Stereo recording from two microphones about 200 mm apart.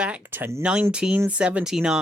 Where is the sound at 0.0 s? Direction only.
5° right (ahead or behind).